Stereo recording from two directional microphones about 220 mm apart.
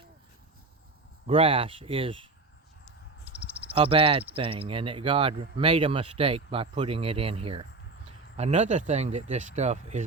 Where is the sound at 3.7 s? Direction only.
25° right (ahead or behind).